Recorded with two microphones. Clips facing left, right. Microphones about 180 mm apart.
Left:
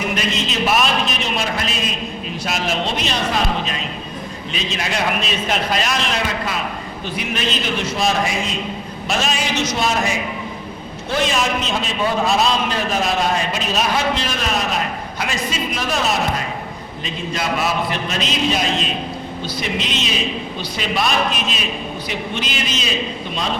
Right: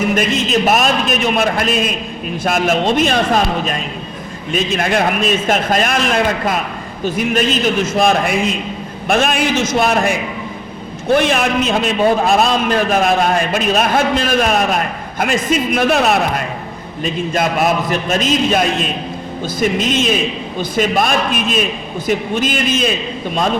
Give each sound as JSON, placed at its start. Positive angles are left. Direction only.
{"t": 0.1, "sound": "a man's voice", "side_deg": -45}